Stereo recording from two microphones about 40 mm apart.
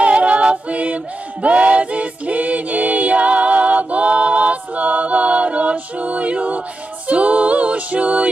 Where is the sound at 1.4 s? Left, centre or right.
Right.